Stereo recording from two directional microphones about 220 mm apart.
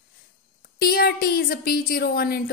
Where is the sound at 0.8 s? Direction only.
45° left (ahead or behind).